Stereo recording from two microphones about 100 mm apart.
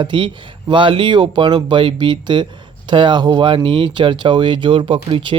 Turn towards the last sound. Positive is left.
turn(degrees=-60)  # may be behind; listen again after turning